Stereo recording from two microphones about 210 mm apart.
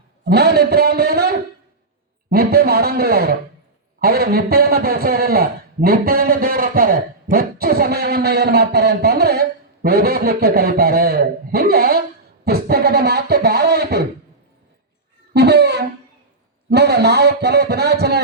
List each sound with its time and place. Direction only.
0.3 s a man's voice: 50° right (ahead or behind)
15.3 s a sound: 50° right (ahead or behind)
16.6 s a man's voice: 50° right (ahead or behind)